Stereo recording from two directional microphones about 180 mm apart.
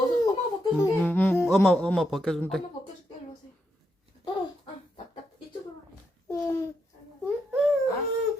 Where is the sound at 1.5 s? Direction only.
Centre (ahead or behind).